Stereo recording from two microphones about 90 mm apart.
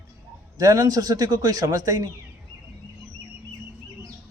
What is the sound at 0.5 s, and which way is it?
A man's voice, 40° right (ahead or behind).